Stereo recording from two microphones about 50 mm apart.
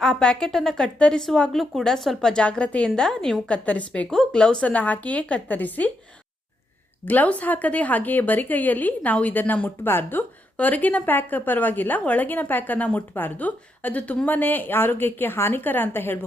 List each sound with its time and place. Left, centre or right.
0.0 s a woman's voice: centre
0.9 s a woman's voice: left
1.5 s a woman's voice: centre
2.3 s a woman's voice: left
3.5 s a woman's voice: left
7.0 s a woman's voice: left